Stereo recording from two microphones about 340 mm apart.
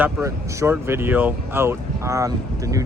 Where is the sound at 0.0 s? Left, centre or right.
Centre.